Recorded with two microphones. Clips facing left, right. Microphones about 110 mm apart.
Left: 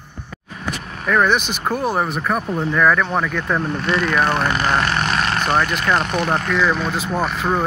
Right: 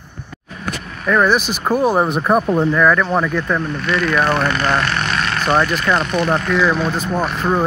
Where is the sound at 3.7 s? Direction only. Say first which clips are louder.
Right 1 dB; 25° left (ahead or behind).